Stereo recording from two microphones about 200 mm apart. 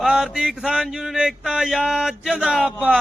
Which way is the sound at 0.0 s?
Centre (ahead or behind).